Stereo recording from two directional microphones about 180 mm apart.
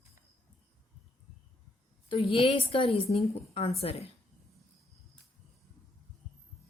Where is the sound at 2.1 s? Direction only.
30° left (ahead or behind).